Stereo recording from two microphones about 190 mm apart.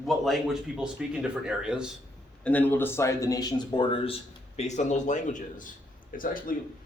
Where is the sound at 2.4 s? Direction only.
10° left (ahead or behind).